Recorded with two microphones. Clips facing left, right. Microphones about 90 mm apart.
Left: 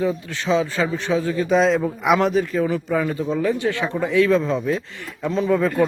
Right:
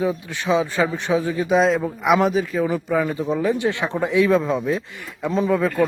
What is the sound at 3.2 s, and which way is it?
Speech, 15° right (ahead or behind).